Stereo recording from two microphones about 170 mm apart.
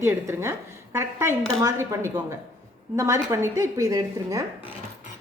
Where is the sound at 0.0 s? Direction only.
15° right (ahead or behind).